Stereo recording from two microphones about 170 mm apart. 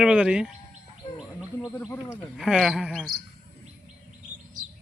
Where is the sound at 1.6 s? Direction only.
15° left (ahead or behind).